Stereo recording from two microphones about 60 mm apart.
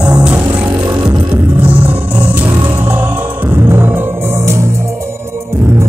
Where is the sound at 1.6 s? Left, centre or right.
Right.